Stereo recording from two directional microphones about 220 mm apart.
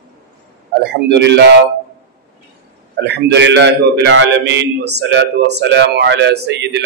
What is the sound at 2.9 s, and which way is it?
A man's voice, 50° right (ahead or behind).